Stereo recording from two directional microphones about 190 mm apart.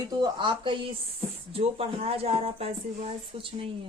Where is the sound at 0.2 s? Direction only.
25° right (ahead or behind).